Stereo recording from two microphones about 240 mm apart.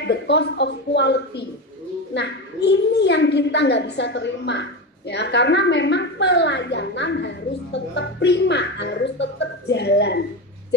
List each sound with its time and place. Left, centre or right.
0.0 s a woman's voice: left